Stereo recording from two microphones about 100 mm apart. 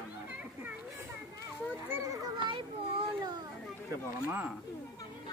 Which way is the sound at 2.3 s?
55° right (ahead or behind).